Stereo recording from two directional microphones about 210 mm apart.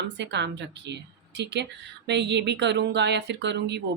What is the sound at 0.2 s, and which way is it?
Speech, 55° right (ahead or behind).